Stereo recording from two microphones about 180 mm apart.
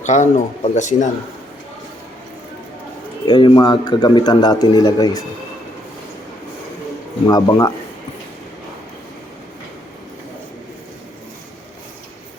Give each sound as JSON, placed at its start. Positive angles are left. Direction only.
{"t": 0.0, "sound": "speech", "side_deg": 40}
{"t": 3.2, "sound": "a man's voice", "side_deg": 25}
{"t": 7.3, "sound": "a man's voice", "side_deg": 20}